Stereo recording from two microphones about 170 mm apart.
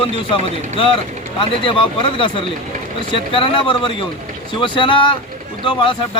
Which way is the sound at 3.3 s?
30° left (ahead or behind).